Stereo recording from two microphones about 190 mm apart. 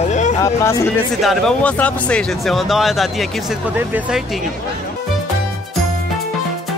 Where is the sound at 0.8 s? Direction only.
5° left (ahead or behind).